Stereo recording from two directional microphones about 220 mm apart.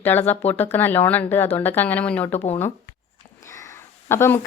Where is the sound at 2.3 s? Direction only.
25° left (ahead or behind).